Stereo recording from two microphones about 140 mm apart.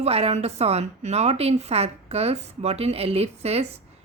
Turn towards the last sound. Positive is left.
turn(degrees=-45)  # may be behind; listen again after turning